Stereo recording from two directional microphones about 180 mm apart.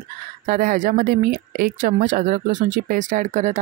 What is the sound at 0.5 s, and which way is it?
Speech, 50° right (ahead or behind).